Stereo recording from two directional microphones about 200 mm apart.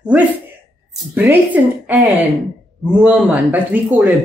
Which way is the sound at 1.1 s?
10° right (ahead or behind).